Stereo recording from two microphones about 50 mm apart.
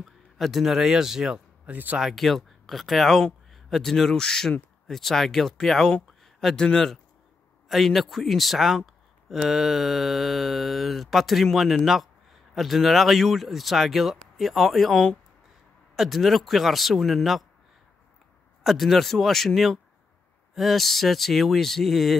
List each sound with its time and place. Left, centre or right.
0.0 s speech: centre
1.7 s speech: right
2.0 s a man's voice: centre
6.2 s a sound: centre
6.6 s speech: centre
7.6 s a man's voice: centre
18.6 s a man's voice: centre